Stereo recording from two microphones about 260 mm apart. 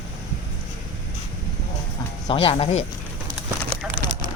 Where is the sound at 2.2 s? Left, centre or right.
Left.